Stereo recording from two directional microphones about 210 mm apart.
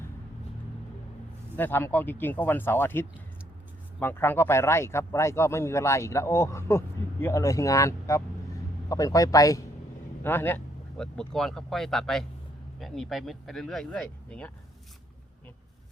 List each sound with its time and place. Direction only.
1.5 s speech: 10° left (ahead or behind)